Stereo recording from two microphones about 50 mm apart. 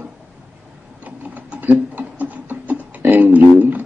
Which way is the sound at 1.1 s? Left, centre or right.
Right.